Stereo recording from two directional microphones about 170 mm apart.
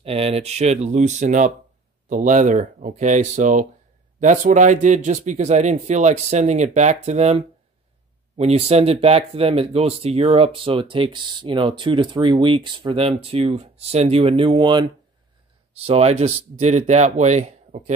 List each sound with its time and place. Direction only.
0.0 s speech: 35° right (ahead or behind)